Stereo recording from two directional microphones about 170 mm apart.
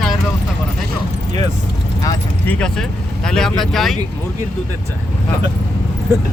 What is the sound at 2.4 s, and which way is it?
Speech, 5° left (ahead or behind).